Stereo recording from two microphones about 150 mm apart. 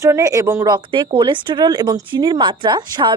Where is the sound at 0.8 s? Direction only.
35° right (ahead or behind).